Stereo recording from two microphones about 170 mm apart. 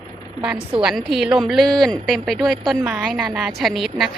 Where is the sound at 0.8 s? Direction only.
Centre (ahead or behind).